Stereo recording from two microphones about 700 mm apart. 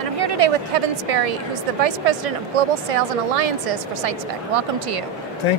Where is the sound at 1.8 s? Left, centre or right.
Right.